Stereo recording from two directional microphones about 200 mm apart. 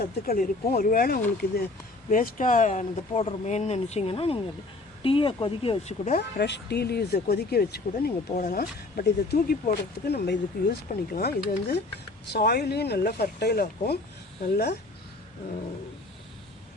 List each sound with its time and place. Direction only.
0.0 s speech: 45° left (ahead or behind); by 6.1 s 30° left (ahead or behind)
6.1 s speech: 55° left (ahead or behind)